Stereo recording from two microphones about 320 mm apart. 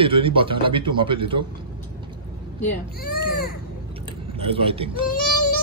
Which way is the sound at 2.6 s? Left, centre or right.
Left.